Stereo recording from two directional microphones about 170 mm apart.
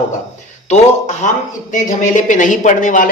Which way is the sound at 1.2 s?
45° left (ahead or behind).